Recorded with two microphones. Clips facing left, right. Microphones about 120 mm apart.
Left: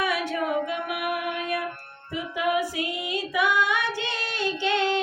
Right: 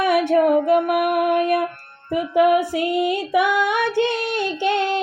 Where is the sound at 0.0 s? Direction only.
60° right (ahead or behind).